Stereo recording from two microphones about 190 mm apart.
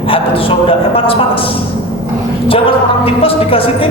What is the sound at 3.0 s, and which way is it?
Speech, 30° left (ahead or behind).